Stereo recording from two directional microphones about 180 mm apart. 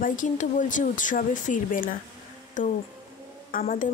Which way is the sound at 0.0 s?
45° left (ahead or behind).